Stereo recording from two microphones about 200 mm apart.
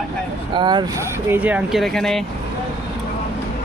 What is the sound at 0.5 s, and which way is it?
Speech, 20° right (ahead or behind).